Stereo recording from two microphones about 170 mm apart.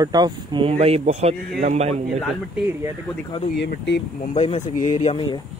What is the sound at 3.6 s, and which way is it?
Speech, 90° left.